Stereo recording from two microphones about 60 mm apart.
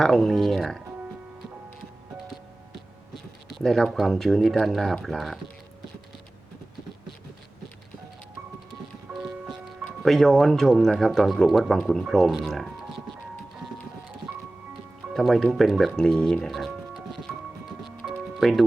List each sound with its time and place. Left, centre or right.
0.0 s speech: centre
3.5 s speech: centre
9.1 s music: right
9.5 s speech: centre
15.1 s speech: centre
16.5 s music: centre